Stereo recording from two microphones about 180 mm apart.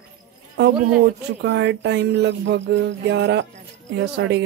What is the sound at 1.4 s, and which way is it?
Speech, 75° right (ahead or behind).